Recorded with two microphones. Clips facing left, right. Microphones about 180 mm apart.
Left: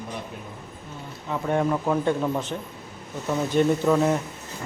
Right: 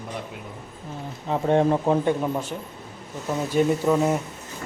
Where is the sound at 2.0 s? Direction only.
10° right (ahead or behind).